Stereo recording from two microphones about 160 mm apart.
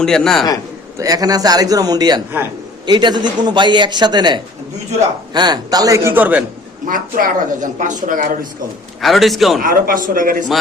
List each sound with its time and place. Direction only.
0.0 s a man's voice: 5° left (ahead or behind)
0.9 s a man's voice: 20° right (ahead or behind)
6.8 s a man's voice: 60° right (ahead or behind)
9.0 s a man's voice: centre (ahead or behind)
9.6 s a man's voice: 60° right (ahead or behind)